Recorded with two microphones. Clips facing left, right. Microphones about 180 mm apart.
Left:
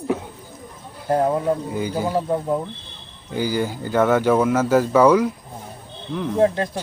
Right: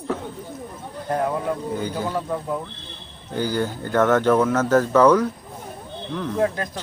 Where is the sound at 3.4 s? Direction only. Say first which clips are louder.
Left 1 dB; 10° left (ahead or behind).